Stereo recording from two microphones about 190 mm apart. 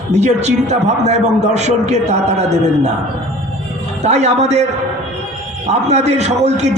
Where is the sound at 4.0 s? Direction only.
35° right (ahead or behind).